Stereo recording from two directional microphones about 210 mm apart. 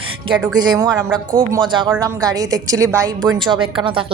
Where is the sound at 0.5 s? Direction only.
20° right (ahead or behind).